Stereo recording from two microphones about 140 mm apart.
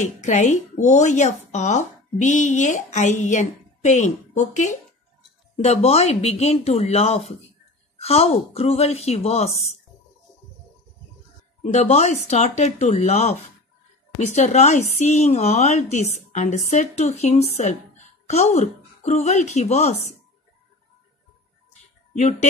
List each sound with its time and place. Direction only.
0.0 s a woman's voice: 60° left (ahead or behind)
5.6 s speech: 50° left (ahead or behind)
11.6 s a woman's voice: 55° left (ahead or behind)